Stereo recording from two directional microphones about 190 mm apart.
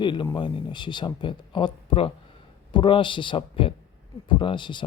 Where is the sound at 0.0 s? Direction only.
25° left (ahead or behind).